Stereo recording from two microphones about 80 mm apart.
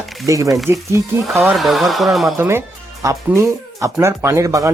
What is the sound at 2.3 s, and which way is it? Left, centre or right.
Speech, right.